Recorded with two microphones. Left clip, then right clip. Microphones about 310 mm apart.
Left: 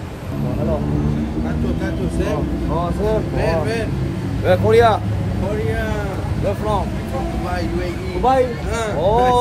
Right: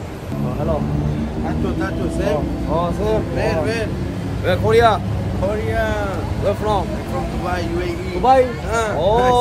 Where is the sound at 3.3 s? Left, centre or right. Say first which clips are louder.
Even; centre.